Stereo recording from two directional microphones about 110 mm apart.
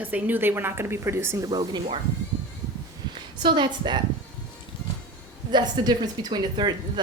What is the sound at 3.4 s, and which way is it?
Speech, 45° right (ahead or behind).